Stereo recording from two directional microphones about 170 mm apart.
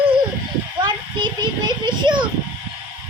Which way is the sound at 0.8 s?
25° right (ahead or behind).